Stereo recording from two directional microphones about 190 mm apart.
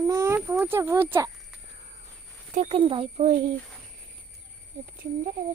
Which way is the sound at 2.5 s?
35° right (ahead or behind).